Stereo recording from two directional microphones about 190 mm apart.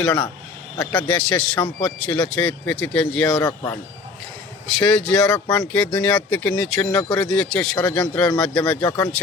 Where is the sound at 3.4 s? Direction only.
15° left (ahead or behind).